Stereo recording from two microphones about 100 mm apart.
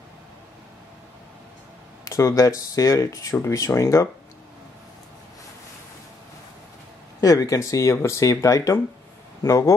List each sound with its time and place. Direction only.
2.0 s speech: 30° left (ahead or behind)
7.2 s speech: 35° left (ahead or behind)